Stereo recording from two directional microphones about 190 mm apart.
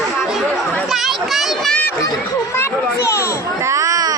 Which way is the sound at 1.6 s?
5° left (ahead or behind).